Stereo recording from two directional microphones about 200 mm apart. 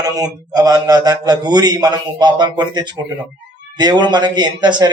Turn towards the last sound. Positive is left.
turn(degrees=-20)  # may be behind; listen again after turning